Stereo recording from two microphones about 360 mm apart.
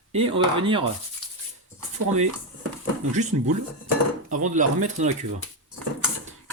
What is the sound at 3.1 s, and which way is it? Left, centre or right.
Speech, centre.